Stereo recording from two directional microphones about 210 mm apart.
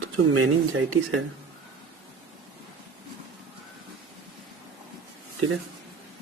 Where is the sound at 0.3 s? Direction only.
75° right (ahead or behind).